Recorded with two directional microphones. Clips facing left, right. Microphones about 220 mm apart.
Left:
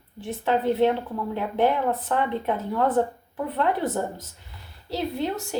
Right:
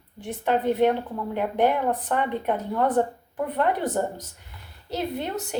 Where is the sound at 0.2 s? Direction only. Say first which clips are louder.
Even; 15° right (ahead or behind).